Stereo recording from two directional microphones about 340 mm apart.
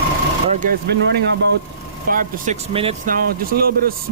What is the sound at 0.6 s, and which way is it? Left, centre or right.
Speech, right.